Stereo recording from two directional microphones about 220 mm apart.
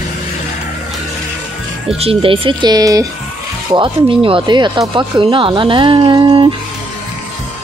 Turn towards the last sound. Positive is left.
turn(degrees=-20)  # may be behind; listen again after turning